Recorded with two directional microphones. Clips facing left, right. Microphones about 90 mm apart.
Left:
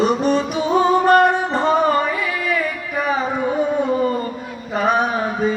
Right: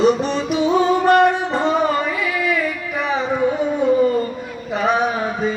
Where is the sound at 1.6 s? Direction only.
45° left (ahead or behind).